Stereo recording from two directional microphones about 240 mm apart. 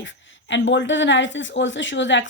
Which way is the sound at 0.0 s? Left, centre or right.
Left.